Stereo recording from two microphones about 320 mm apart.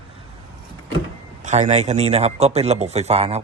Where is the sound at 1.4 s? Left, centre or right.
Right.